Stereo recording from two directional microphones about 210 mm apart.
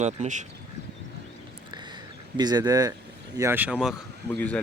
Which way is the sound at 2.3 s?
20° right (ahead or behind).